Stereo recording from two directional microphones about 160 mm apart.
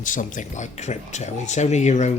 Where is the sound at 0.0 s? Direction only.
55° left (ahead or behind).